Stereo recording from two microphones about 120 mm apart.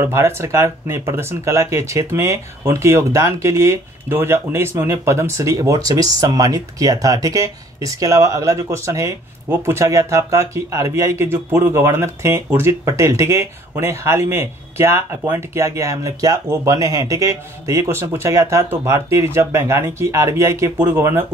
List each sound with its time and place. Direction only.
0.0 s speech: 20° right (ahead or behind)